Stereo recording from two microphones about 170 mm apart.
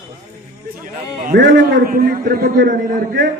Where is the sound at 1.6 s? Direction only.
55° right (ahead or behind).